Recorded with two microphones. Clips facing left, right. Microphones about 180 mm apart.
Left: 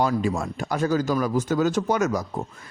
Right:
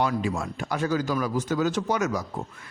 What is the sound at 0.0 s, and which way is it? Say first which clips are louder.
A man's voice: left 3 dB; 40° left (ahead or behind).